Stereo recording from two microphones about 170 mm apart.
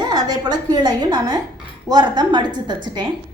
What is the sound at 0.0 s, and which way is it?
A woman's voice, 25° right (ahead or behind).